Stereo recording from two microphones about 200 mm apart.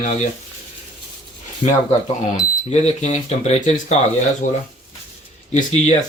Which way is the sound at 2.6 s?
35° left (ahead or behind).